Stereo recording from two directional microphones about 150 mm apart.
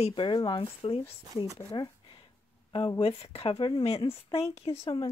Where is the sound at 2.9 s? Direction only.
40° left (ahead or behind).